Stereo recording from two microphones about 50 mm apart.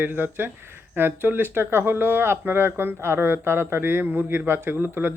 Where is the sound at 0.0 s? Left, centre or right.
Right.